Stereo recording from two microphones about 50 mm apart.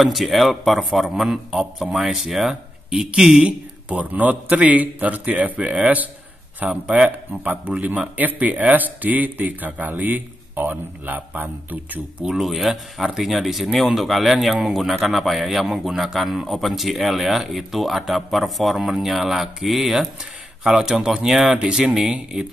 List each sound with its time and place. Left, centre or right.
0.0 s a man's voice: centre
2.9 s a man's voice: centre; by 12.3 s right
12.3 s a man's voice: centre